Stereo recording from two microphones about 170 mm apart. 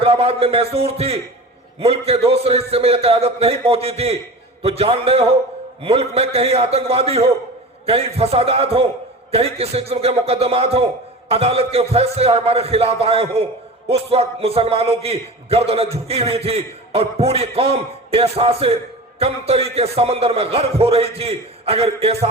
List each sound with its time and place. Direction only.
0.0 s a man's voice: 35° right (ahead or behind)